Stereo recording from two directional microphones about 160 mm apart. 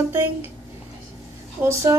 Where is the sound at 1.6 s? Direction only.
20° right (ahead or behind).